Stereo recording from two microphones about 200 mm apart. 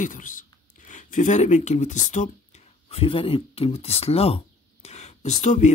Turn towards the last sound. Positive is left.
turn(degrees=35)  # may be behind; listen again after turning